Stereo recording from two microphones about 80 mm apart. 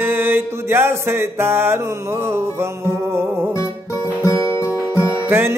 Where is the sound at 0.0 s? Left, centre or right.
Right.